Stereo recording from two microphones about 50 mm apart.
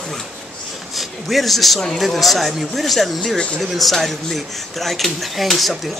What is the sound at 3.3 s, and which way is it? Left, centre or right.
Speech, left.